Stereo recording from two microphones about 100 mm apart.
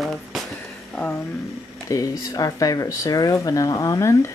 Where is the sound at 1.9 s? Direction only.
35° left (ahead or behind).